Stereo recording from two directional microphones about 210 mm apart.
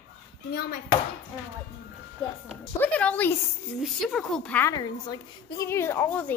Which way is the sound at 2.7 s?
5° left (ahead or behind).